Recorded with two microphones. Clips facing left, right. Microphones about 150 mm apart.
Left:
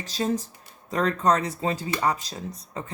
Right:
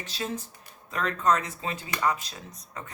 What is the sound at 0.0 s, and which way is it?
Speech, 40° left (ahead or behind).